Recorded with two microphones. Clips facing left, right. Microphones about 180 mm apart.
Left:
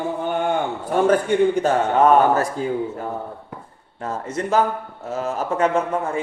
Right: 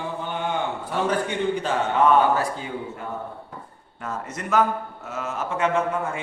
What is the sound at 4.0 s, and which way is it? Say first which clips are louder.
A man's voice: left 6 dB; 30° left (ahead or behind).